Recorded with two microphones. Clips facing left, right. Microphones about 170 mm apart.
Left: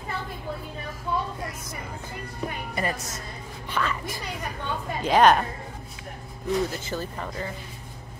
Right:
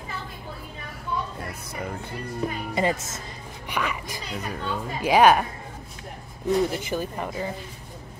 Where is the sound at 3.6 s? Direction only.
15° right (ahead or behind).